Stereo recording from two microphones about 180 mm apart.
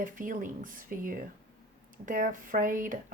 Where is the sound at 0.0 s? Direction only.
50° right (ahead or behind).